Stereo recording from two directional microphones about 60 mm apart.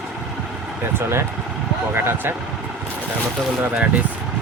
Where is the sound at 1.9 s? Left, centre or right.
Right.